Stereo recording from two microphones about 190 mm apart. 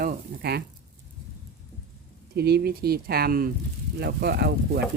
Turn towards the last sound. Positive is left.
turn(degrees=-55)  # may be behind; listen again after turning